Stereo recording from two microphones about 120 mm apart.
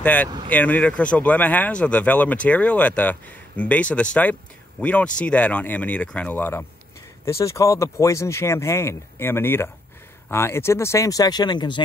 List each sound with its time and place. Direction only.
0.0 s speech: 10° left (ahead or behind); by 11.8 s 40° left (ahead or behind)